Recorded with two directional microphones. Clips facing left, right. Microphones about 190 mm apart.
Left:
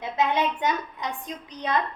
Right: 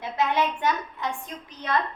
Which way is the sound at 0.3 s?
20° left (ahead or behind).